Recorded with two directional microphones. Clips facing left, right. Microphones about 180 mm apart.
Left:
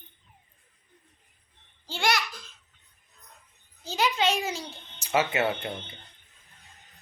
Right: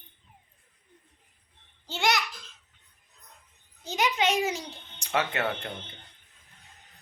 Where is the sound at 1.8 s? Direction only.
20° right (ahead or behind).